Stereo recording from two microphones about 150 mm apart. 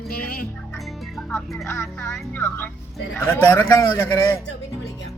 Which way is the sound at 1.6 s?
15° left (ahead or behind).